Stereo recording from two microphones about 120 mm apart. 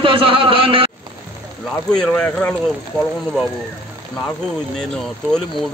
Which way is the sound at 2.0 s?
5° left (ahead or behind).